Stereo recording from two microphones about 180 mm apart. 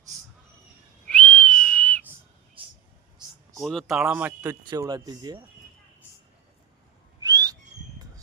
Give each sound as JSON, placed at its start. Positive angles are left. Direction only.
{"t": 1.0, "sound": "whistle", "side_deg": 10}
{"t": 2.6, "sound": "a sound", "side_deg": -30}
{"t": 3.6, "sound": "speech", "side_deg": 0}
{"t": 4.6, "sound": "speech", "side_deg": -25}
{"t": 7.2, "sound": "whistling", "side_deg": -20}